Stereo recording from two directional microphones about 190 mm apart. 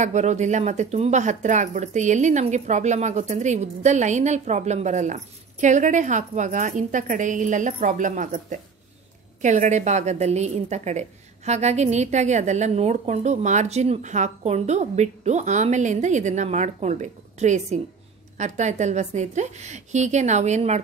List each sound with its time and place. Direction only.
0.0 s speech: 40° right (ahead or behind)